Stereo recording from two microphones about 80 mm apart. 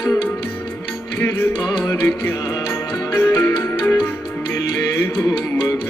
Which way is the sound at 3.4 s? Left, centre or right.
Left.